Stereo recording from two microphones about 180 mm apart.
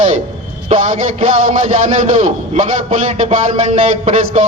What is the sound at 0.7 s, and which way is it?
A man's voice, 40° right (ahead or behind).